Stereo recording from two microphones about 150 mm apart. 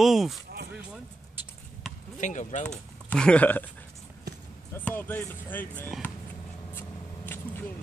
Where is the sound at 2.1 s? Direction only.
55° left (ahead or behind).